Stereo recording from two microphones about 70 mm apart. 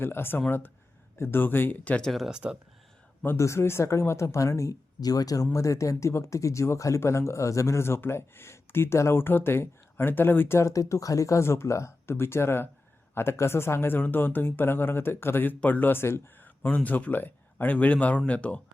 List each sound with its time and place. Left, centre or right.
0.0 s speech: left
2.0 s speech: centre
2.3 s speech: centre
3.3 s speech: left
5.5 s speech: left
10.6 s speech: left
16.4 s speech: left